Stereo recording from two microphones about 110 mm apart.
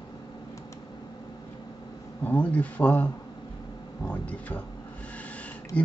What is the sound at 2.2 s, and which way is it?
Speech, 15° left (ahead or behind).